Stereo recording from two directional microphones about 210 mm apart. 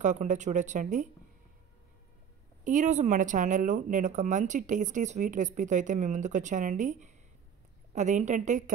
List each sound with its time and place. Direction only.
0.0 s speech: 35° right (ahead or behind)
2.6 s speech: 35° right (ahead or behind)